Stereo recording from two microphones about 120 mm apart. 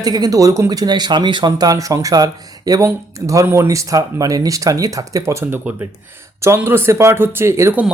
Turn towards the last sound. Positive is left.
turn(degrees=-25)  # may be behind; listen again after turning